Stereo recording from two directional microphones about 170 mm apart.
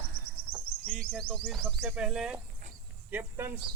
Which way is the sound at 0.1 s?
35° left (ahead or behind).